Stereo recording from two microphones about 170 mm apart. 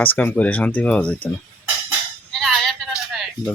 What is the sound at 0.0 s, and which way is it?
Speech, 10° left (ahead or behind).